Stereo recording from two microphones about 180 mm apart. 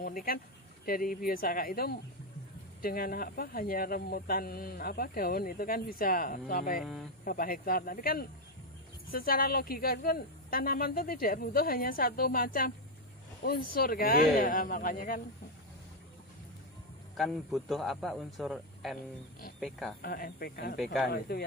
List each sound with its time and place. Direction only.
0.0 s speech: 55° left (ahead or behind)
6.8 s a man's voice: centre (ahead or behind)
7.2 s speech: 55° left (ahead or behind)
17.2 s a man's voice: centre (ahead or behind)
20.0 s speech: 60° left (ahead or behind)
20.7 s a man's voice: centre (ahead or behind)
21.1 s speech: 60° left (ahead or behind)